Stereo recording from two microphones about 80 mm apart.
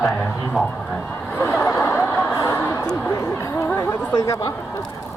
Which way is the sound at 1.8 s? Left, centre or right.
Left.